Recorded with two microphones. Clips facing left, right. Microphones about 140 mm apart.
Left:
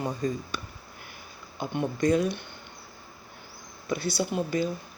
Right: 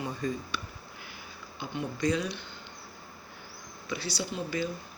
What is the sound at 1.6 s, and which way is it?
Speech, 50° left (ahead or behind).